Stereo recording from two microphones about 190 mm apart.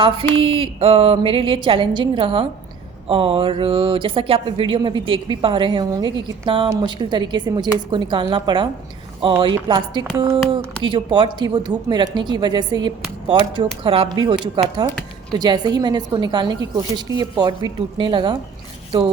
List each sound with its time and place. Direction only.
0.4 s speech: 30° right (ahead or behind)